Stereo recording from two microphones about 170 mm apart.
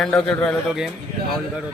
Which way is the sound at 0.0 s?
5° left (ahead or behind).